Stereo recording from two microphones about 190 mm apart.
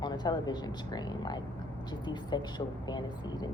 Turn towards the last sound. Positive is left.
turn(degrees=20)  # may be behind; listen again after turning